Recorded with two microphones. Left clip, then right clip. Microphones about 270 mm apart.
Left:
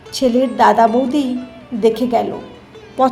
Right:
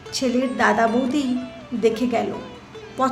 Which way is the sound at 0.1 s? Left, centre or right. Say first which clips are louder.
Left 7 dB; centre.